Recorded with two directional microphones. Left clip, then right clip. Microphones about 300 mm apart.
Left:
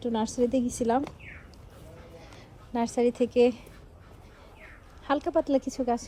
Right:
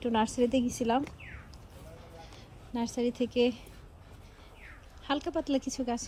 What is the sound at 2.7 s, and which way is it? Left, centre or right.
Speech, centre.